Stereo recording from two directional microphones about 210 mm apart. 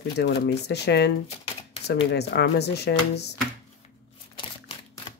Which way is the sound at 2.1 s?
50° left (ahead or behind).